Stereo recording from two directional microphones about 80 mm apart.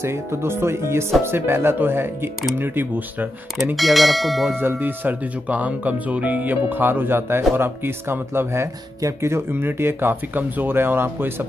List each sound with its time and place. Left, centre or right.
0.0 s speech: right
3.7 s speech: centre
4.6 s speech: right